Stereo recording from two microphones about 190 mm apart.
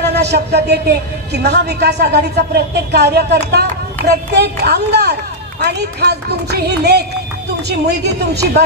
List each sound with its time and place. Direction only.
0.0 s a woman's voice: 60° right (ahead or behind)